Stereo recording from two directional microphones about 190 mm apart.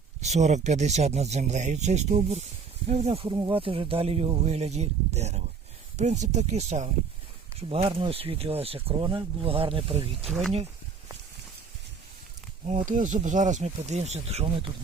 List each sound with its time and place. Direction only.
0.2 s speech: 35° right (ahead or behind)
12.6 s speech: 40° right (ahead or behind)